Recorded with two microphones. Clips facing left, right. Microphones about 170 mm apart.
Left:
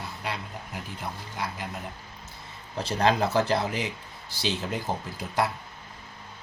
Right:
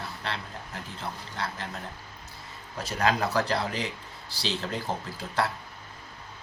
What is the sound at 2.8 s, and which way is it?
Speech, 30° left (ahead or behind).